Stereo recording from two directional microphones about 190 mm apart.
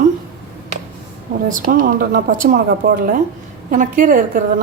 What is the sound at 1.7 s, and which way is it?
Speech, 45° right (ahead or behind).